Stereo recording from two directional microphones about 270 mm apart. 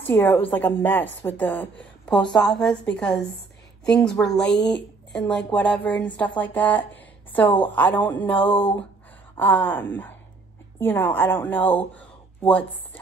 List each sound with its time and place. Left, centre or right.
0.0 s a woman's voice: centre
8.5 s speech: centre
9.4 s a woman's voice: centre